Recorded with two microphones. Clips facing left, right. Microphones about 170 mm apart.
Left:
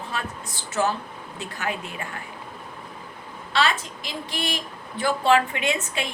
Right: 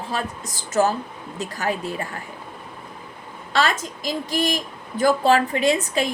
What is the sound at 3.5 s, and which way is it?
A woman's voice, 45° right (ahead or behind).